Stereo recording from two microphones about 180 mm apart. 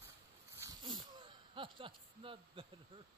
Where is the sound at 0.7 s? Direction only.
20° right (ahead or behind).